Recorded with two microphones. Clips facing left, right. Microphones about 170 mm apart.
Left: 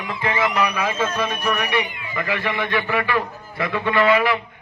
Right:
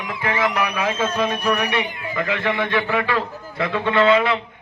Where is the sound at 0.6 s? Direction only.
15° right (ahead or behind).